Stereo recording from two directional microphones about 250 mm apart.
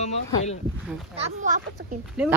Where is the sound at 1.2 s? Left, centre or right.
Right.